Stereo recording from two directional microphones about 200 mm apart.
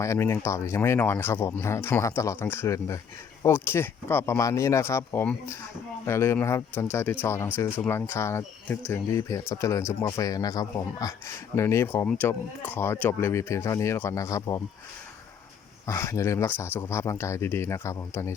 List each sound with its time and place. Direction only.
0.0 s speech: 15° left (ahead or behind)
15.9 s speech: 15° left (ahead or behind)